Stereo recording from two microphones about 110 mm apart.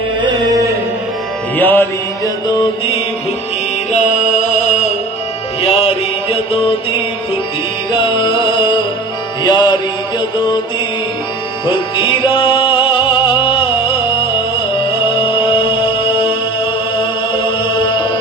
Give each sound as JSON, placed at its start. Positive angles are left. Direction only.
{"t": 1.5, "sound": "music", "side_deg": 15}
{"t": 3.9, "sound": "music", "side_deg": 90}
{"t": 5.6, "sound": "mantra", "side_deg": 60}
{"t": 7.9, "sound": "music", "side_deg": 50}
{"t": 11.6, "sound": "music", "side_deg": 45}
{"t": 15.1, "sound": "music", "side_deg": 50}
{"t": 17.8, "sound": "music", "side_deg": 45}